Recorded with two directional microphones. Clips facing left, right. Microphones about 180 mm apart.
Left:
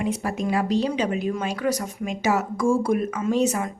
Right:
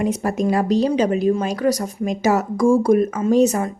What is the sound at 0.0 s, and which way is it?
Speech, 45° right (ahead or behind).